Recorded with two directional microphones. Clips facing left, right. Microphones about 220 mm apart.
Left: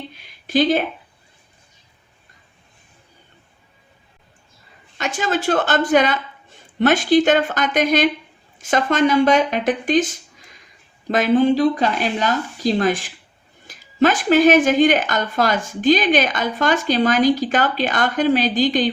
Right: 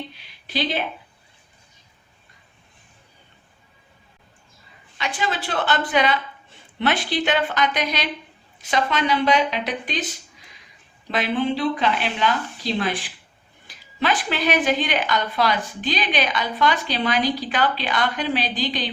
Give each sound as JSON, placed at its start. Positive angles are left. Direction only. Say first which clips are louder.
{"t": 0.2, "sound": "speech", "louder": "left 10 dB", "side_deg": 45}
{"t": 4.9, "sound": "a woman's voice", "louder": "left 5 dB", "side_deg": 45}